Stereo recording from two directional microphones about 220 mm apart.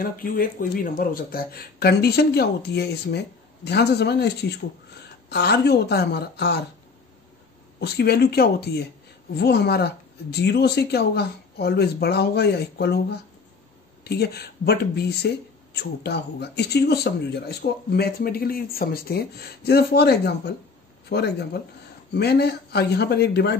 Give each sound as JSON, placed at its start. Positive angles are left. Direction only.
{"t": 0.0, "sound": "speech", "side_deg": 40}
{"t": 7.8, "sound": "speech", "side_deg": 50}